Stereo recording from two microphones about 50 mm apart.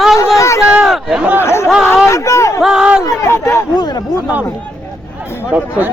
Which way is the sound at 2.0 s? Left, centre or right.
Left.